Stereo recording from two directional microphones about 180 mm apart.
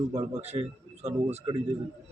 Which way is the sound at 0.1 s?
35° right (ahead or behind).